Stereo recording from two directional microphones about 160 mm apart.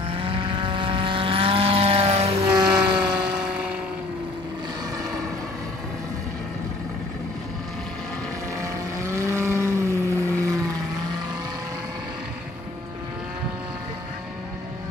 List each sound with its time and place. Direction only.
0.1 s vehicle: 35° right (ahead or behind)
2.4 s vehicle: 25° right (ahead or behind)
3.0 s vehicle: 5° right (ahead or behind)
8.5 s vehicle: 20° right (ahead or behind)